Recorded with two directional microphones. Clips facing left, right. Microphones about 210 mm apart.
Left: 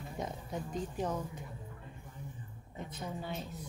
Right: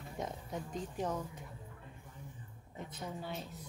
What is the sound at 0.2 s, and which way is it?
Speech, centre (ahead or behind).